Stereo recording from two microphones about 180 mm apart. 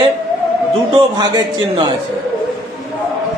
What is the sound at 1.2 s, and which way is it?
Speech, 20° right (ahead or behind).